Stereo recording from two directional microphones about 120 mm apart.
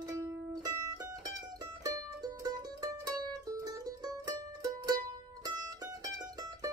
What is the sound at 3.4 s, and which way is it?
Music, 35° right (ahead or behind).